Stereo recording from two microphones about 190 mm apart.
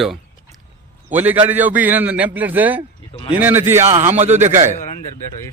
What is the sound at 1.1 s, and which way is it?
A man's voice, 10° right (ahead or behind).